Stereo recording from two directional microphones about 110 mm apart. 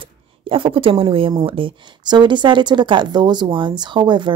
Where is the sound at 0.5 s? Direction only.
55° right (ahead or behind).